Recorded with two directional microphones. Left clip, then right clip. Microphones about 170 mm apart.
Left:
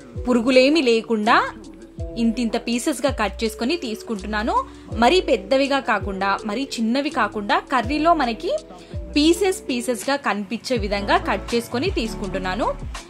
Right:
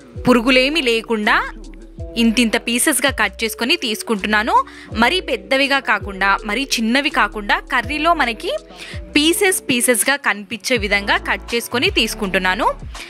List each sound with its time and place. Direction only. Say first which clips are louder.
0.2 s speech: right 3 dB; 20° right (ahead or behind)